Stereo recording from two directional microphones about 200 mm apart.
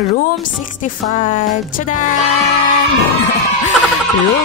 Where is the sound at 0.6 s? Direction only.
40° left (ahead or behind).